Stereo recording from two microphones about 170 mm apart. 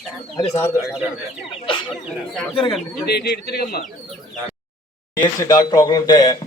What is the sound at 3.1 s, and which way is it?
Speech, 70° left (ahead or behind).